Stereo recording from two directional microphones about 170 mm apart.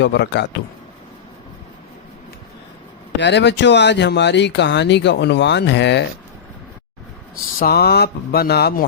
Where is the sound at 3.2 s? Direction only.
90° left.